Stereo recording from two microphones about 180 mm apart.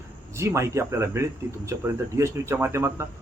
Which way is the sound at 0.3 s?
15° right (ahead or behind).